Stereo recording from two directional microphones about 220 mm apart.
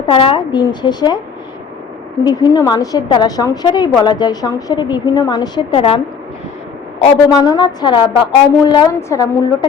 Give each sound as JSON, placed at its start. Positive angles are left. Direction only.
{"t": 0.0, "sound": "a woman's voice", "side_deg": 25}
{"t": 2.2, "sound": "a woman's voice", "side_deg": 20}
{"t": 7.3, "sound": "a woman's voice", "side_deg": 15}